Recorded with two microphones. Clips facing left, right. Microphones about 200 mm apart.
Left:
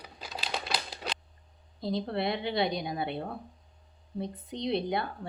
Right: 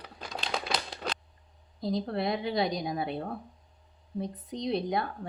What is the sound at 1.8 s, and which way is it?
A woman's voice, 30° left (ahead or behind).